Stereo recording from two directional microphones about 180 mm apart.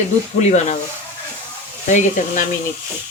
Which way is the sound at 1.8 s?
40° left (ahead or behind).